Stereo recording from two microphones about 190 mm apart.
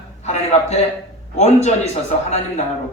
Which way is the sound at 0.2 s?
35° left (ahead or behind).